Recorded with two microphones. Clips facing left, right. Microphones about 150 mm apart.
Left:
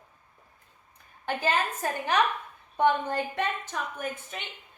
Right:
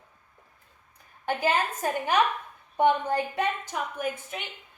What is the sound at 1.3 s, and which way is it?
A woman's voice, 10° right (ahead or behind).